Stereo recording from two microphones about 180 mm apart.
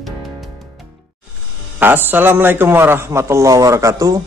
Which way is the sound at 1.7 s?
10° right (ahead or behind).